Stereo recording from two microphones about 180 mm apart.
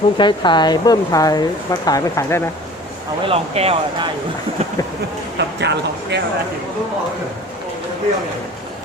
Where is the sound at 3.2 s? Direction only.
35° right (ahead or behind).